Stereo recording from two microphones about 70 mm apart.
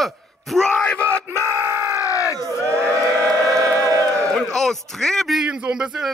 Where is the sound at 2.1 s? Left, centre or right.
Left.